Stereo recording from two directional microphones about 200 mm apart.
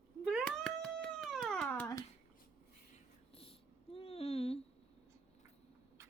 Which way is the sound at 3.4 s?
30° left (ahead or behind).